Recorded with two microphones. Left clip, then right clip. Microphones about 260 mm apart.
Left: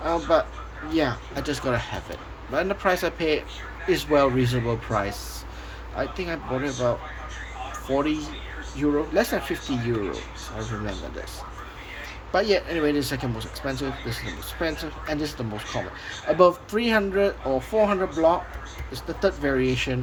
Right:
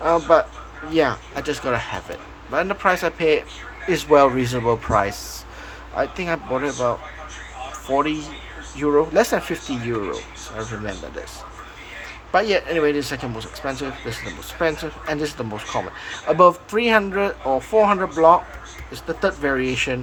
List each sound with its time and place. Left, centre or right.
0.0 s speech: centre
7.9 s speech: centre
12.3 s speech: centre
17.4 s speech: right
17.7 s speech: centre